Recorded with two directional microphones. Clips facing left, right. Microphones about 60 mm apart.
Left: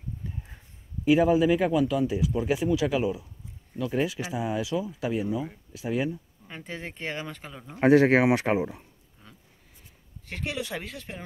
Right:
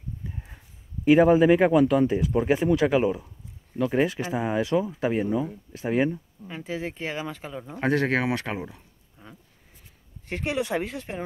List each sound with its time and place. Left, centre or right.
1.0 s speech: right
6.4 s speech: centre
7.8 s speech: centre
9.2 s a sound: centre
10.2 s speech: right